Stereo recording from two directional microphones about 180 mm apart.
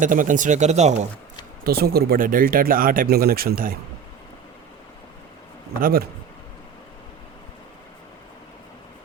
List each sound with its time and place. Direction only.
0.0 s speech: 45° right (ahead or behind)
1.6 s speech: 60° right (ahead or behind)
5.8 s speech: 55° right (ahead or behind)